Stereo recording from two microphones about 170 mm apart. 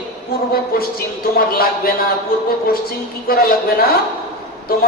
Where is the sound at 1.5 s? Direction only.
60° left (ahead or behind).